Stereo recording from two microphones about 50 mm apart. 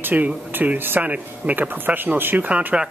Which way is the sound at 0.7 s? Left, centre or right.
Right.